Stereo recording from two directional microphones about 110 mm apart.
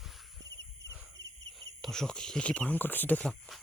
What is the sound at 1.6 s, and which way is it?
Speech, 5° left (ahead or behind).